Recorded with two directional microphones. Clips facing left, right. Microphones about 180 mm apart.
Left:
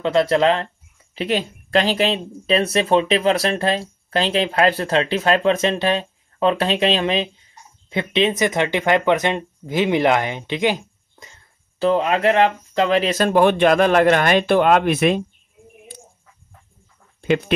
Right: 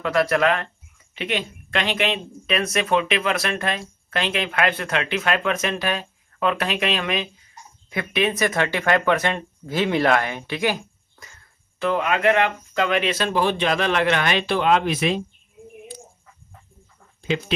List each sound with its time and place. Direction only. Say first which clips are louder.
0.0 s speech: left 3 dB; 25° left (ahead or behind)
11.8 s speech: left 3 dB; 30° left (ahead or behind); by 15.2 s 55° left (ahead or behind)